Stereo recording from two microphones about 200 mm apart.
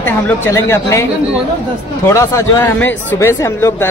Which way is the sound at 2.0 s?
15° left (ahead or behind).